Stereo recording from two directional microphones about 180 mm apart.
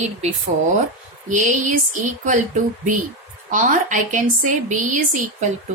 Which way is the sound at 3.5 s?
45° right (ahead or behind).